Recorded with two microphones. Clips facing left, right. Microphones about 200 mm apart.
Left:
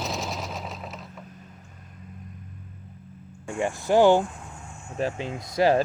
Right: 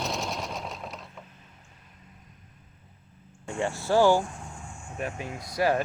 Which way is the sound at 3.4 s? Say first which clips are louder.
Left 3 dB; 15° left (ahead or behind).